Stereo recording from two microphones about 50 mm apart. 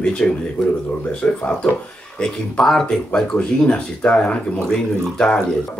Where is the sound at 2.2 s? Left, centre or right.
Centre.